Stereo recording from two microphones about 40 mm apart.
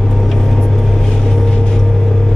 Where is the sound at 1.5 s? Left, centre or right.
Centre.